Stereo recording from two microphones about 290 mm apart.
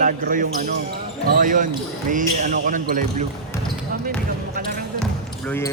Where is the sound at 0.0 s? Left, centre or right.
Right.